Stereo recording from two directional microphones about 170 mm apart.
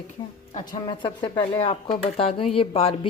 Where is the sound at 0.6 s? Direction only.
25° left (ahead or behind).